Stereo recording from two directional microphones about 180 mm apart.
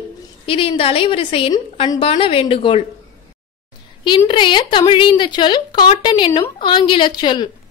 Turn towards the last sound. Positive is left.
turn(degrees=25)  # may be behind; listen again after turning